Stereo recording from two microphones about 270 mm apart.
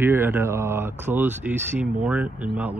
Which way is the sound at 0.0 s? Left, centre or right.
Centre.